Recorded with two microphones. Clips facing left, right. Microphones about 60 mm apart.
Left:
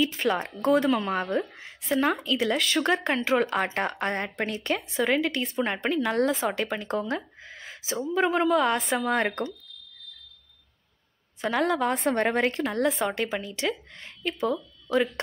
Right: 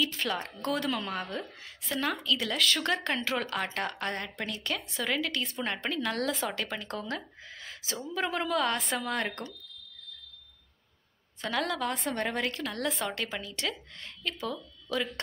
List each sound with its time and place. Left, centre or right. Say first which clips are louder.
0.0 s a woman's voice: left 6 dB; centre
2.4 s a woman's voice: left 7 dB; centre
5.4 s a woman's voice: left 7 dB; centre
5.7 s a woman's voice: left 4 dB; left
11.4 s speech: left 6 dB; left
12.1 s a woman's voice: left 10 dB; left
12.8 s a woman's voice: left 6 dB; centre